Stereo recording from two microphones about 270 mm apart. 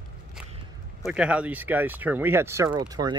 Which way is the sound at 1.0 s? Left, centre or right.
Centre.